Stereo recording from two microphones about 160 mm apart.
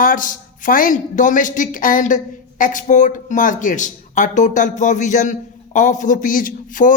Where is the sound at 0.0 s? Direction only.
60° left (ahead or behind).